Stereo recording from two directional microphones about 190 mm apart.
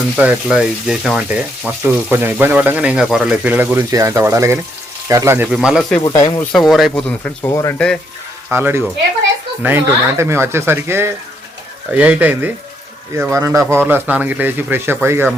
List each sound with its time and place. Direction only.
0.2 s speech: 5° right (ahead or behind)
5.5 s speech: 5° right (ahead or behind)
6.1 s speech: 20° left (ahead or behind)
6.5 s speech: centre (ahead or behind)
7.1 s speech: 10° left (ahead or behind)
8.4 s speech: 10° right (ahead or behind)